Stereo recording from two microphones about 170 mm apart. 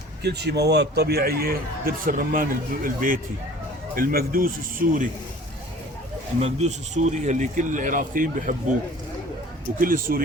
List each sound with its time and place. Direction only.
0.2 s a man's voice: 80° right; by 5.0 s 55° right (ahead or behind)
6.4 s speech: 40° right (ahead or behind)
9.8 s a man's voice: 55° right (ahead or behind)